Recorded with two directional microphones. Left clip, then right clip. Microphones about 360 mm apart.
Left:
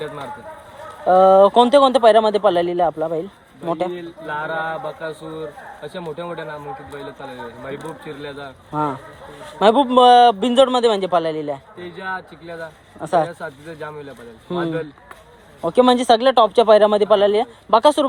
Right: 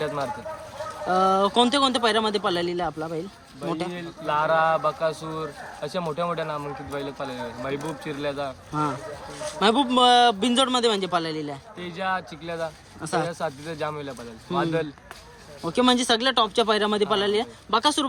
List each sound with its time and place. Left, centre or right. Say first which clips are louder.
1.0 s speech: left 10 dB; centre
3.9 s speech: right 1 dB; centre
7.7 s speech: left 1 dB; centre
8.7 s speech: left 6 dB; centre
11.8 s speech: even; centre
13.0 s speech: left 9 dB; centre
13.2 s speech: even; centre
15.6 s speech: left 7 dB; centre